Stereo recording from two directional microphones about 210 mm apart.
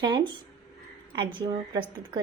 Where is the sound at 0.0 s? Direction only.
20° right (ahead or behind).